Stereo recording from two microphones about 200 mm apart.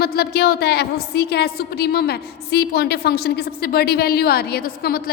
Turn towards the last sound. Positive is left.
turn(degrees=50)  # may be behind; listen again after turning